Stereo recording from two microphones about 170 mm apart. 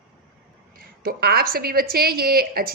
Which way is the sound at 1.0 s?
65° right (ahead or behind).